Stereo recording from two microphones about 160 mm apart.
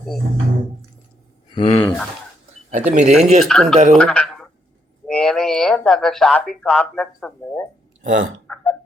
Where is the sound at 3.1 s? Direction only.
5° left (ahead or behind).